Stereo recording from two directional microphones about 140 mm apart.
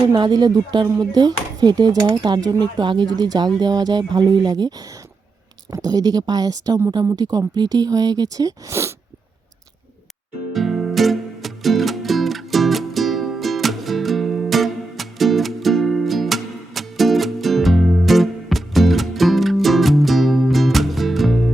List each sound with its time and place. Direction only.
0.1 s a woman's voice: 30° right (ahead or behind)
5.7 s a woman's voice: 25° right (ahead or behind)
10.5 s music: centre (ahead or behind)